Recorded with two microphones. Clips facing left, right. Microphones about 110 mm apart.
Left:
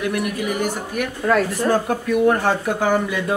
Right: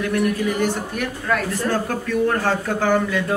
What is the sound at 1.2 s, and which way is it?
Speech, 30° left (ahead or behind).